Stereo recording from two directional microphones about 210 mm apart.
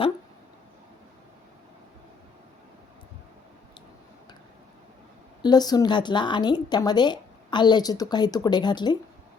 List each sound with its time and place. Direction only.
5.4 s a woman's voice: 20° left (ahead or behind)